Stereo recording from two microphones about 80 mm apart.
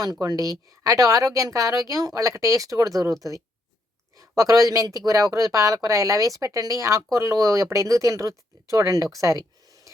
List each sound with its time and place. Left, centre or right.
0.0 s speech: right
4.2 s speech: right